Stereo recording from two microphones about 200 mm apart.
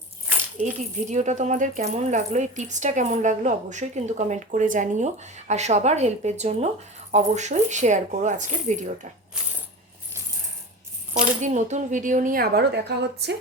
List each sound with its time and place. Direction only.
0.6 s speech: 35° right (ahead or behind)
11.1 s speech: 35° right (ahead or behind); by 13.3 s 55° right (ahead or behind)